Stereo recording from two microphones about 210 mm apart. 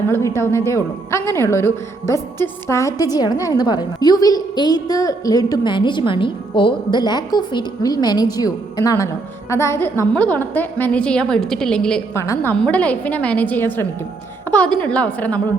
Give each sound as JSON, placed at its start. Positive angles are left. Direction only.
{"t": 0.1, "sound": "a woman's voice", "side_deg": 15}